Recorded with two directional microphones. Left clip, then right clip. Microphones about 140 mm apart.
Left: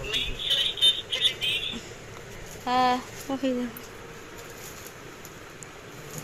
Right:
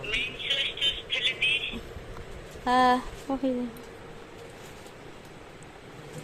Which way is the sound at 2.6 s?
30° right (ahead or behind).